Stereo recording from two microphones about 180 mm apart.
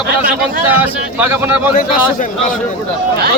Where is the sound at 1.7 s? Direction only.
50° left (ahead or behind).